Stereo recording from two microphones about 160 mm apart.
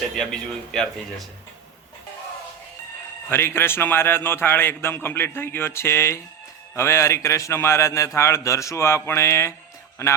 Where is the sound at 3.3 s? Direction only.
15° left (ahead or behind).